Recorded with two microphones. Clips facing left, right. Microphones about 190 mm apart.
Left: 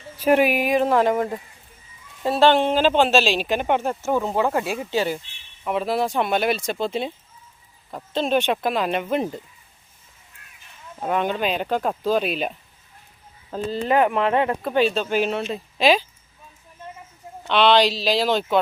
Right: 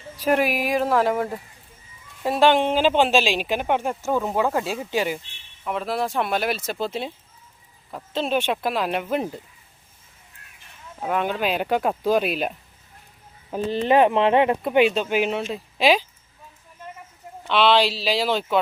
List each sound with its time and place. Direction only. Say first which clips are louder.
0.3 s speech: left 3 dB; centre (ahead or behind)
2.2 s speech: left 1 dB; 10° right (ahead or behind)
4.0 s speech: left 1 dB; 15° left (ahead or behind)
4.9 s speech: left 1 dB; 15° right (ahead or behind)
5.6 s speech: left 3 dB; centre (ahead or behind)
11.0 s speech: left 1 dB; 5° right (ahead or behind)
13.5 s speech: right 2 dB; 20° right (ahead or behind)
17.5 s speech: left 1 dB; 5° right (ahead or behind)